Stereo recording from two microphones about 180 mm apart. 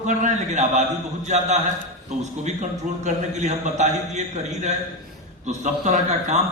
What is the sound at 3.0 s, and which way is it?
A man's voice, 40° right (ahead or behind).